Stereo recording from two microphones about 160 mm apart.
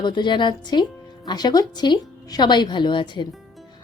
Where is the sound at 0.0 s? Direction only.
30° left (ahead or behind).